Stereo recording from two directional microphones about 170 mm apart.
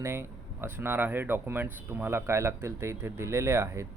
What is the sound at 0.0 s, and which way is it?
Speech, 15° right (ahead or behind).